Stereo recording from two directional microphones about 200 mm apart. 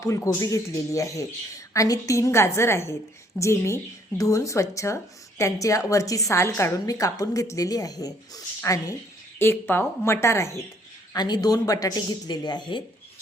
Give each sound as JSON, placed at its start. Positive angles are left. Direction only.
{"t": 0.0, "sound": "a woman's voice", "side_deg": 15}